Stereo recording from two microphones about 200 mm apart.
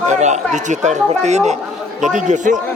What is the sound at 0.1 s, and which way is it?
A man's voice, 35° right (ahead or behind).